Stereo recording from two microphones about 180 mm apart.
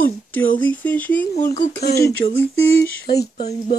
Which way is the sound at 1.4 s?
60° left (ahead or behind).